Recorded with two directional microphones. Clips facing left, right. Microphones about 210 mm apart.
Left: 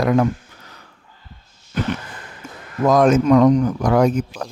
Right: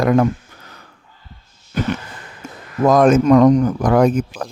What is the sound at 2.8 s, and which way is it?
Speech, 50° right (ahead or behind).